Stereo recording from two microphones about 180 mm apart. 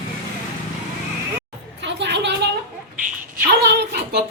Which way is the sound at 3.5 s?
65° right (ahead or behind).